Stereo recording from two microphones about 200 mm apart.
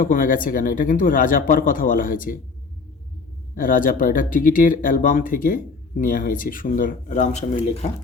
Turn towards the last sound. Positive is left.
turn(degrees=40)  # may be behind; listen again after turning